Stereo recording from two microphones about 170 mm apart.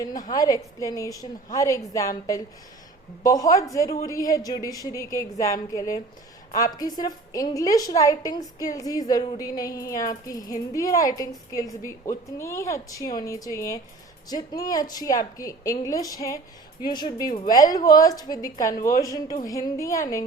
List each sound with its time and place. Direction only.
0.3 s a woman's voice: 20° left (ahead or behind)